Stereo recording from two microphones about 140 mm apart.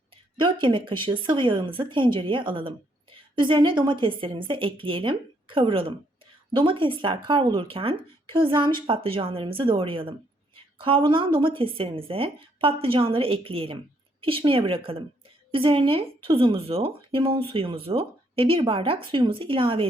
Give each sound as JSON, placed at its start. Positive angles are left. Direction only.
{"t": 0.3, "sound": "a woman's voice", "side_deg": -35}